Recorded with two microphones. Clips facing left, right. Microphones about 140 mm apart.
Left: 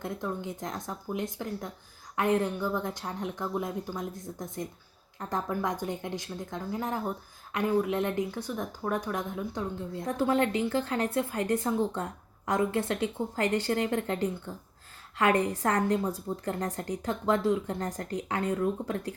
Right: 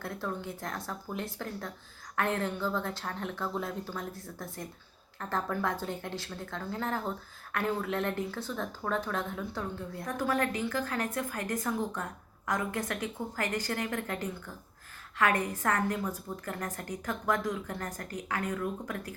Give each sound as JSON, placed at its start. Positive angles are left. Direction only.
{"t": 0.0, "sound": "a woman's voice", "side_deg": 20}